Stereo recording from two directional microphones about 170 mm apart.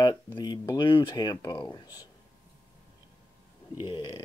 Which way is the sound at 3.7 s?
30° left (ahead or behind).